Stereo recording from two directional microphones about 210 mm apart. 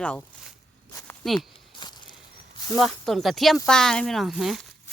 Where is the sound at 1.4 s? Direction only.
20° left (ahead or behind).